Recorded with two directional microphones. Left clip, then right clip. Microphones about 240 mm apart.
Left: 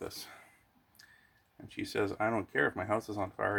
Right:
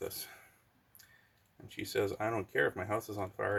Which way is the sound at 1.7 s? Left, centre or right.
Left.